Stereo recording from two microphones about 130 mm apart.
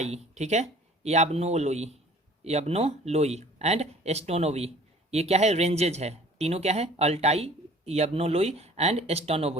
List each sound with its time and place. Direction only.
0.0 s speech: 60° right (ahead or behind)